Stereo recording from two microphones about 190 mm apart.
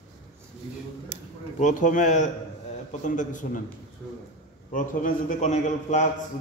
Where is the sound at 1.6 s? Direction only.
40° left (ahead or behind).